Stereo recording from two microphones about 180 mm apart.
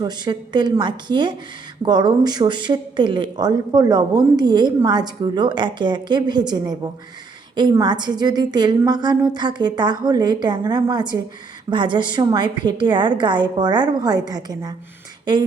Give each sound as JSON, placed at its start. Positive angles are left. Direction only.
{"t": 0.0, "sound": "speech", "side_deg": -25}